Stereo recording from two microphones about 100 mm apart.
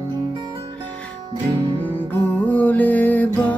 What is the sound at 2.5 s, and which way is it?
Music, 15° left (ahead or behind).